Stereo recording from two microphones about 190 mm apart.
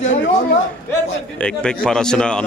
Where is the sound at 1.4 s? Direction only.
5° left (ahead or behind).